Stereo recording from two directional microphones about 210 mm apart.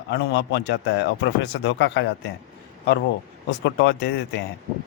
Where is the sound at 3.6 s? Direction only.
55° left (ahead or behind).